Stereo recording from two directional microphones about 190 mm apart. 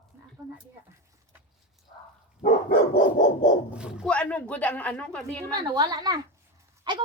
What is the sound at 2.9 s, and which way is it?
Dog, 50° left (ahead or behind).